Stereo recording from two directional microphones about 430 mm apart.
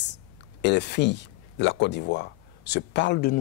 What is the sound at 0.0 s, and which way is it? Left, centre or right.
Speech, left.